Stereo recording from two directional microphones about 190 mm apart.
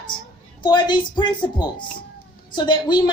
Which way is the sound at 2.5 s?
25° left (ahead or behind).